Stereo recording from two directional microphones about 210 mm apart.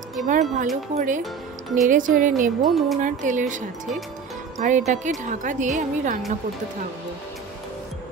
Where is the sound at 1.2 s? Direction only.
Centre (ahead or behind).